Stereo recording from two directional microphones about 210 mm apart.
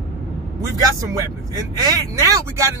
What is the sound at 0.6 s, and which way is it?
Speech, 15° right (ahead or behind).